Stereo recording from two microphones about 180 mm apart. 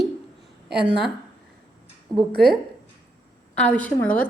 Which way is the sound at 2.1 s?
20° right (ahead or behind).